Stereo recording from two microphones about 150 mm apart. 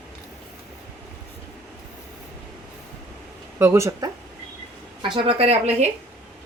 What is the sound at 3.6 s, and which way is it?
Speech, 15° right (ahead or behind).